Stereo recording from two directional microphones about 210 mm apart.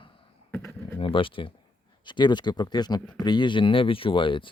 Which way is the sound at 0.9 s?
25° left (ahead or behind).